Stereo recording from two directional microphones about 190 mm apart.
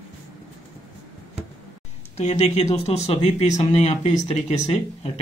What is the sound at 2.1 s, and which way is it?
Speech, 35° left (ahead or behind).